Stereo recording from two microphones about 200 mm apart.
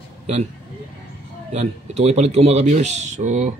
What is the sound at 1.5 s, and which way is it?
Speech, 35° right (ahead or behind).